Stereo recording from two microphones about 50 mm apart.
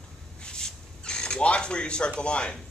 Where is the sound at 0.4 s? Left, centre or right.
Centre.